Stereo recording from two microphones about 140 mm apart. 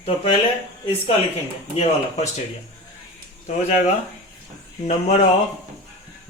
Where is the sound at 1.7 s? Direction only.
50° left (ahead or behind).